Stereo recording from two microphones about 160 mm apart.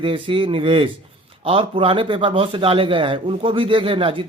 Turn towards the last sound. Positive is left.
turn(degrees=-35)  # may be behind; listen again after turning